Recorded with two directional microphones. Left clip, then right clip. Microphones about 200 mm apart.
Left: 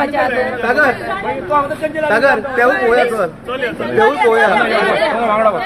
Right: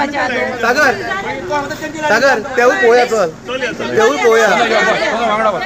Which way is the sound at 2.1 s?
45° right (ahead or behind).